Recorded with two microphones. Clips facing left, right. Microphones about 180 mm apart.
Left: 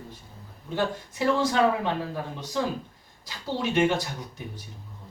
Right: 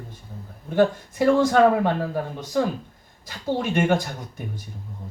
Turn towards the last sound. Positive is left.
turn(degrees=-50)  # may be behind; listen again after turning